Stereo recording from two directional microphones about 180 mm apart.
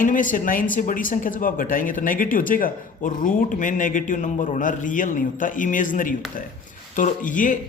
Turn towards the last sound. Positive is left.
turn(degrees=45)  # may be behind; listen again after turning